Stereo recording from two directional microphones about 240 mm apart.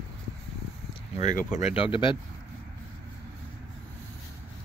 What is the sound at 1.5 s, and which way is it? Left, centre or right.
Speech, left.